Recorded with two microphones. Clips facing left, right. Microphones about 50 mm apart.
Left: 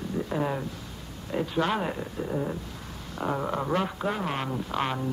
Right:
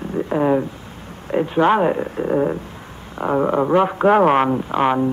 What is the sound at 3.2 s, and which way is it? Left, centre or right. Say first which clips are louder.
Speech: right 11 dB; right.